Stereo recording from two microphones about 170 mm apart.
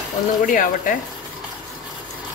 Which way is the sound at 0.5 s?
55° left (ahead or behind).